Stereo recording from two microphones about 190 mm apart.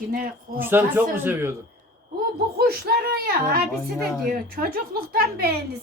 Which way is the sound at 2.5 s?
55° right (ahead or behind).